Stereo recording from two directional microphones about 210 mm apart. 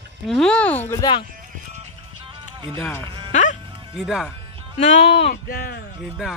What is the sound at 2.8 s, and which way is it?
Speech, 10° left (ahead or behind).